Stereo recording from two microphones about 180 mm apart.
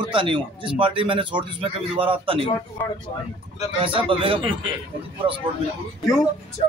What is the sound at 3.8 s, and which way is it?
A man's voice, 30° right (ahead or behind).